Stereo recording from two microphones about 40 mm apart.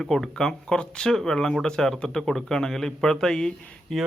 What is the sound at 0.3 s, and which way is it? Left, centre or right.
Speech, centre.